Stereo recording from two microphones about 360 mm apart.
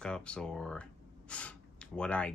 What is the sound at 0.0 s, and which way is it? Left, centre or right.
Speech, centre.